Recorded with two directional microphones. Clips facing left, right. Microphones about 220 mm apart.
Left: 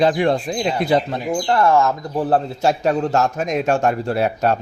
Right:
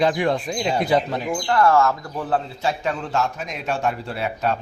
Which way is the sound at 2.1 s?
40° left (ahead or behind).